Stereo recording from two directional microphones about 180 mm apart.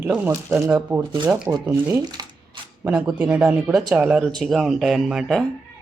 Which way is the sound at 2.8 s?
5° right (ahead or behind).